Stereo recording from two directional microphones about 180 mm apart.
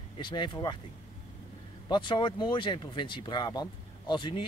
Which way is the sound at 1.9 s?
25° left (ahead or behind).